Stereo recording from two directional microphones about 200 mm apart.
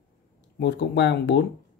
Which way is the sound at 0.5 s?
55° left (ahead or behind).